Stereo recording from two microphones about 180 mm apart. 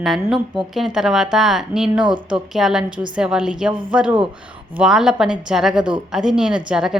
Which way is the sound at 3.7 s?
25° right (ahead or behind).